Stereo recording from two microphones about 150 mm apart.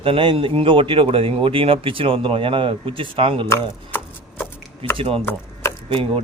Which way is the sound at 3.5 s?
15° left (ahead or behind).